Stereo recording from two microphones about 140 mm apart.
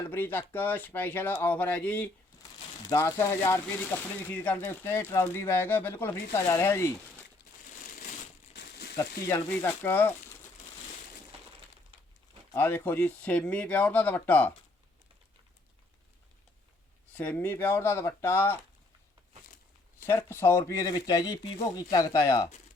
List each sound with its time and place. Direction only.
0.1 s speech: 15° left (ahead or behind)
9.0 s speech: 20° left (ahead or behind)
12.5 s speech: 15° left (ahead or behind)
17.1 s speech: 15° left (ahead or behind)
20.0 s speech: 15° left (ahead or behind)